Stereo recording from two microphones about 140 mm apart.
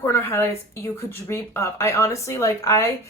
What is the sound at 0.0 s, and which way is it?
A woman's voice, 15° left (ahead or behind).